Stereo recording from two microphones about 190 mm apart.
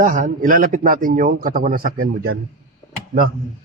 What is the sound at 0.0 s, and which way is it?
A man's voice, 45° right (ahead or behind).